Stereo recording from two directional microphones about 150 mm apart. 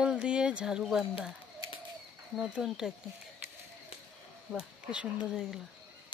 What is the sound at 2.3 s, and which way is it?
Speech, 5° right (ahead or behind).